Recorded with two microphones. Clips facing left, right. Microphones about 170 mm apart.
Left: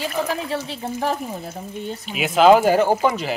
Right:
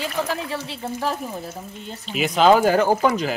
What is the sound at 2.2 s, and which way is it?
Speech, 5° left (ahead or behind).